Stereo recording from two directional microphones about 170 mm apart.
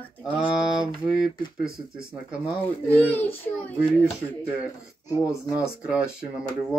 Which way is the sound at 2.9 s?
10° left (ahead or behind).